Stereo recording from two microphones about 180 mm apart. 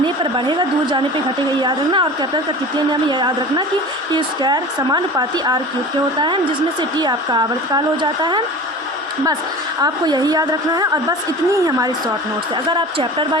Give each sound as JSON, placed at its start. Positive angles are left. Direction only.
{"t": 0.0, "sound": "a woman's voice", "side_deg": -25}
{"t": 9.8, "sound": "speech", "side_deg": -20}